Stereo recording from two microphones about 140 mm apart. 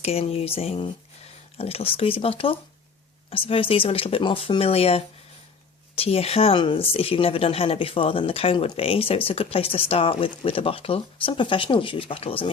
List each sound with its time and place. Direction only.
0.0 s speech: 45° left (ahead or behind)